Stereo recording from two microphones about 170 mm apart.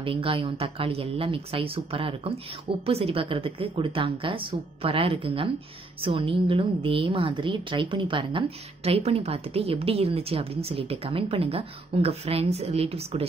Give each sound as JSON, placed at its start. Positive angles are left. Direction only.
{"t": 0.0, "sound": "a woman's voice", "side_deg": -30}